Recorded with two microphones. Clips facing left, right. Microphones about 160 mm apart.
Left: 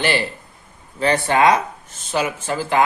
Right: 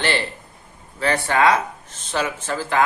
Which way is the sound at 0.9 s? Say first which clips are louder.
Left 3 dB; 20° left (ahead or behind).